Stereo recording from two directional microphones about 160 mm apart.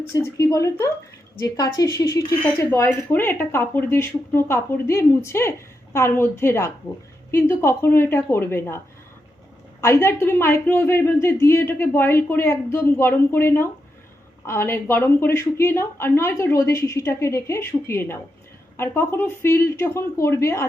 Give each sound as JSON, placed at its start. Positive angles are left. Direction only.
{"t": 0.1, "sound": "speech", "side_deg": 20}
{"t": 9.8, "sound": "speech", "side_deg": 15}